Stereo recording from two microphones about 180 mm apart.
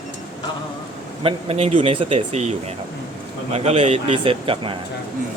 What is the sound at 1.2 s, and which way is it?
Speech, 30° right (ahead or behind).